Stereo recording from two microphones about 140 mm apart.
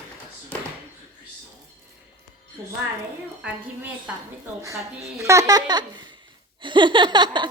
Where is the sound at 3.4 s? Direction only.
10° right (ahead or behind).